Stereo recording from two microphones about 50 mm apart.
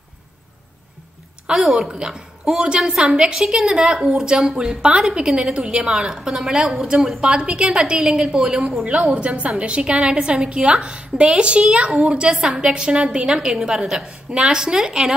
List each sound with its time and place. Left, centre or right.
1.5 s a woman's voice: centre
9.0 s a woman's voice: right